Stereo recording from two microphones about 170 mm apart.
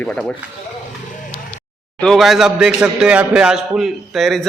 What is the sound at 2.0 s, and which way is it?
A man's voice, centre (ahead or behind).